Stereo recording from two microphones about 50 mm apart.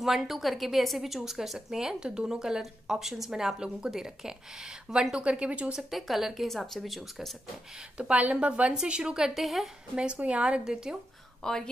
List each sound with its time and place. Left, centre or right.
0.0 s a woman's voice: centre
5.2 s a woman's voice: right
5.7 s speech: centre
8.0 s a woman's voice: right; by 9.7 s centre
9.9 s a woman's voice: right
10.6 s a woman's voice: centre
11.4 s a woman's voice: centre